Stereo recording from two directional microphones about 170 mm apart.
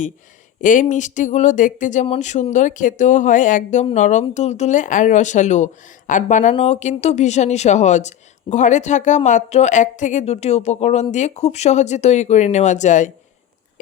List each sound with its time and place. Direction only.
0.6 s speech: 50° left (ahead or behind)